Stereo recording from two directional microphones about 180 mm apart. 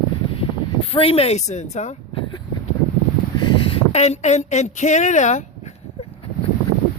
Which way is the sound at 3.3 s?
35° left (ahead or behind).